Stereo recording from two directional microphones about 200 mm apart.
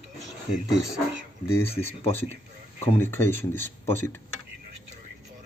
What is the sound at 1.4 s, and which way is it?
Speech, 10° left (ahead or behind).